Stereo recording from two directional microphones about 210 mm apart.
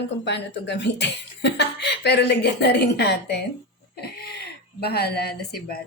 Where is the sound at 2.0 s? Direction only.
50° left (ahead or behind).